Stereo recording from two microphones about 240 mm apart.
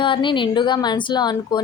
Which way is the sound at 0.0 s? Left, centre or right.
Centre.